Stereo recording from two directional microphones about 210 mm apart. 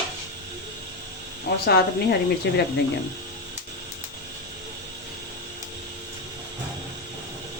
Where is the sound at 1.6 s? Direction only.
50° left (ahead or behind).